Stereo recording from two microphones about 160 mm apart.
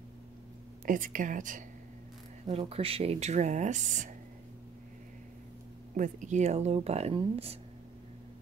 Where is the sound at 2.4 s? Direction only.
30° right (ahead or behind); by 4.1 s 50° right (ahead or behind).